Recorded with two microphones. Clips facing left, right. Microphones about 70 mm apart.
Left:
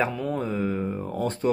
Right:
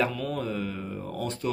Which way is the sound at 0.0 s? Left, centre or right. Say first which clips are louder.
Left 2 dB; left.